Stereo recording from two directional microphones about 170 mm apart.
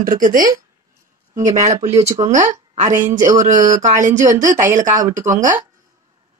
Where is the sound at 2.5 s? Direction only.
45° right (ahead or behind).